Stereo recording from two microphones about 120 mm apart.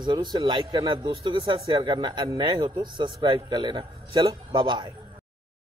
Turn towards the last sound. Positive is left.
turn(degrees=-40)  # may be behind; listen again after turning